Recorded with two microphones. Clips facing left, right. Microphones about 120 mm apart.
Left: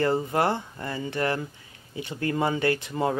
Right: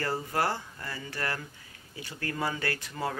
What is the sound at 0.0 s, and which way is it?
Speech, 20° left (ahead or behind).